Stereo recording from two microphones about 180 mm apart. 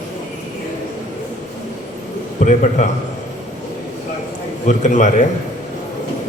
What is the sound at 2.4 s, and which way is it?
Speech, 45° left (ahead or behind).